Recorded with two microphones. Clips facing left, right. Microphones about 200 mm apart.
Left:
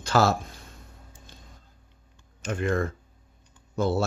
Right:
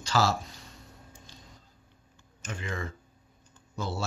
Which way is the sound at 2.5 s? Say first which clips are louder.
Left 10 dB; 55° left (ahead or behind).